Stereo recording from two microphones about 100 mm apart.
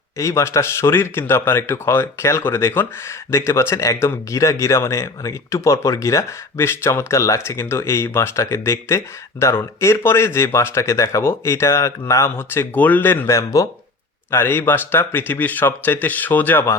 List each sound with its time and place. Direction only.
0.2 s speech: 30° left (ahead or behind)
14.3 s speech: 20° left (ahead or behind)